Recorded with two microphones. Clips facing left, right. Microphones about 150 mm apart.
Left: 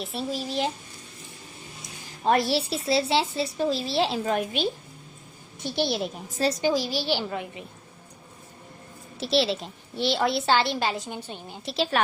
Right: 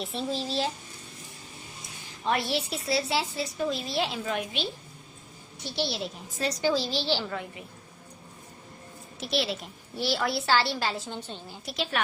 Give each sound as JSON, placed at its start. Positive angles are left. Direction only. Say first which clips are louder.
{"t": 0.0, "sound": "speech", "louder": "left 1 dB", "side_deg": 0}
{"t": 0.3, "sound": "a woman's voice", "louder": "left 2 dB", "side_deg": 15}
{"t": 2.2, "sound": "a woman's voice", "louder": "left 5 dB", "side_deg": 40}
{"t": 6.6, "sound": "a woman's voice", "louder": "left 2 dB", "side_deg": 15}
{"t": 9.2, "sound": "a child's voice", "louder": "left 6 dB", "side_deg": 30}